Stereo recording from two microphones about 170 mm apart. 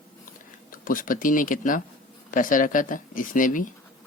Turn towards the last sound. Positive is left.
turn(degrees=50)  # may be behind; listen again after turning